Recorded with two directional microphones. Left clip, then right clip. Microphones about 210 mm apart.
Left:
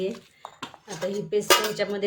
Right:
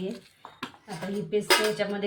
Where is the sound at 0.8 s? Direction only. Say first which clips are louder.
Left 5 dB; 60° left (ahead or behind).